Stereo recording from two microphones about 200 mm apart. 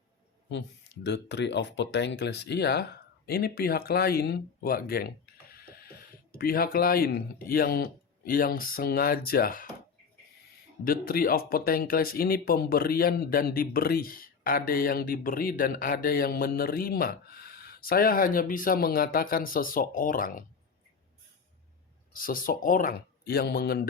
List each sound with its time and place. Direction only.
0.5 s speech: 60° left (ahead or behind)
10.8 s speech: 45° left (ahead or behind)
22.1 s speech: 45° left (ahead or behind)